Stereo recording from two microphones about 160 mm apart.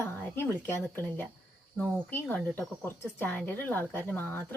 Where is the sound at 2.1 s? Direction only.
15° left (ahead or behind).